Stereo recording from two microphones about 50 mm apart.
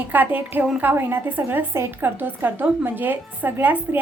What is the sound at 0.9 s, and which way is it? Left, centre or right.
A woman's voice, right.